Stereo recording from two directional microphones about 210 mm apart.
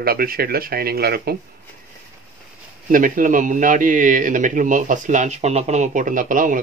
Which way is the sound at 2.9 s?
40° right (ahead or behind).